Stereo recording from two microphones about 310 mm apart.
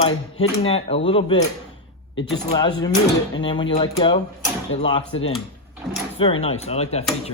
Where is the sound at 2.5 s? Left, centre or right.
Centre.